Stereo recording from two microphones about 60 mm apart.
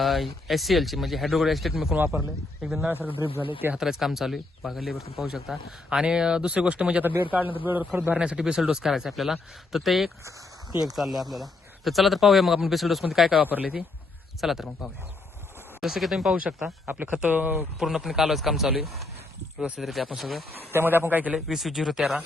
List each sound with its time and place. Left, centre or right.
0.0 s speech: centre
2.9 s a man's voice: right
3.8 s speech: centre
7.0 s a man's voice: right
8.1 s speech: centre
13.3 s speech: right
14.4 s speech: centre
16.8 s speech: right
17.7 s speech: centre
20.7 s a man's voice: right
21.3 s speech: centre